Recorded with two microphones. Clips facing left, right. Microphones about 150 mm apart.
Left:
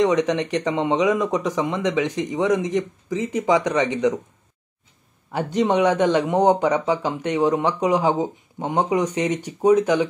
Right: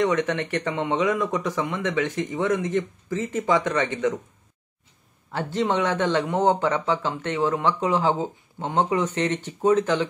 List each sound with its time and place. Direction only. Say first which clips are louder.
0.0 s a man's voice: left 4 dB; 20° left (ahead or behind)
5.3 s a man's voice: left 4 dB; 15° left (ahead or behind)